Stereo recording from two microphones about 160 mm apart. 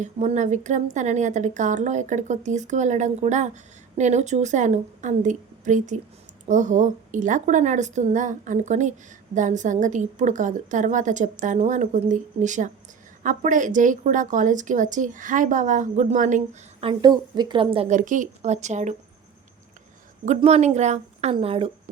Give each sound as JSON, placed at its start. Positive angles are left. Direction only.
{"t": 0.0, "sound": "a woman's voice", "side_deg": -45}
{"t": 16.8, "sound": "a woman's voice", "side_deg": -25}
{"t": 17.9, "sound": "a woman's voice", "side_deg": -50}
{"t": 20.2, "sound": "a woman's voice", "side_deg": -45}